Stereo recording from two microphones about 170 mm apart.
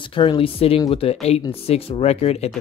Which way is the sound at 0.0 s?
30° left (ahead or behind).